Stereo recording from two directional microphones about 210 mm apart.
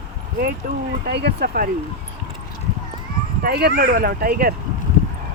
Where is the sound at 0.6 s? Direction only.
40° right (ahead or behind).